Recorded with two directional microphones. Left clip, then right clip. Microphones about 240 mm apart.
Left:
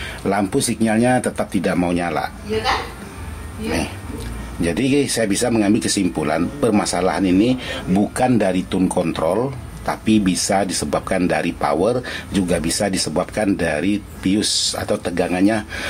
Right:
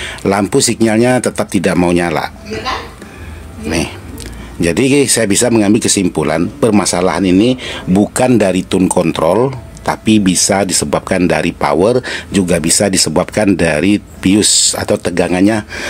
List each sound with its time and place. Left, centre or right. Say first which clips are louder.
0.0 s speech: right 6 dB; right
4.6 s speech: right 7 dB; right